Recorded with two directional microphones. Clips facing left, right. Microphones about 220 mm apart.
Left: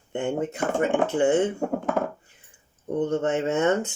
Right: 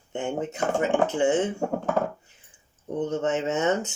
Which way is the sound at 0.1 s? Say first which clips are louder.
Left 2 dB; 55° left (ahead or behind).